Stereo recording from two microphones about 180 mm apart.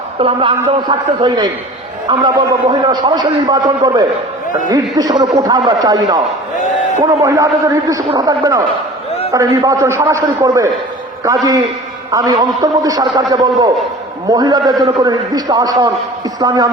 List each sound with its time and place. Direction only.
0.2 s a man's voice: 30° right (ahead or behind)
12.1 s a man's voice: 20° right (ahead or behind)